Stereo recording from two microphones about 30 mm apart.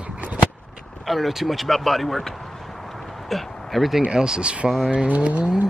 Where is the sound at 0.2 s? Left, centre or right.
Right.